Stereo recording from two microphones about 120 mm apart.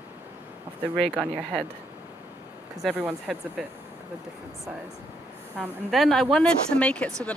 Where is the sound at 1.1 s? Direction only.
10° right (ahead or behind).